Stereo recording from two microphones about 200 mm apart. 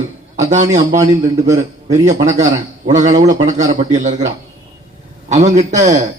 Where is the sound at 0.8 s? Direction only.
20° right (ahead or behind).